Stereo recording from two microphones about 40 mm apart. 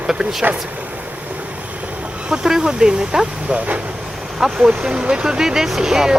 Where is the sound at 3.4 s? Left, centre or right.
Right.